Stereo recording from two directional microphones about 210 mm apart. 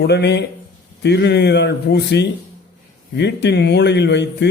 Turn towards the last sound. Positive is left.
turn(degrees=55)  # may be behind; listen again after turning